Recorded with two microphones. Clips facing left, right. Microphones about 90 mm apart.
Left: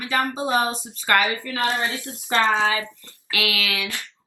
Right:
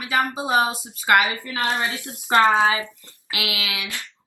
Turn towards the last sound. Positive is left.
turn(degrees=-20)  # may be behind; listen again after turning